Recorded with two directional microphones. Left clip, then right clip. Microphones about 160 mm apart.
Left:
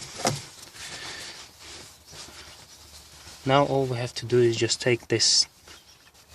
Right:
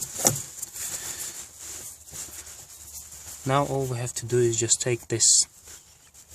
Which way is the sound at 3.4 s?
5° left (ahead or behind).